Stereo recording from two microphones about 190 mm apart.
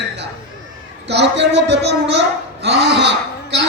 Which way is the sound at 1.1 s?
65° right (ahead or behind).